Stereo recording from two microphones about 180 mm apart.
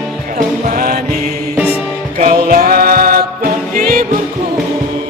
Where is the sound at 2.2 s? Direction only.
50° right (ahead or behind).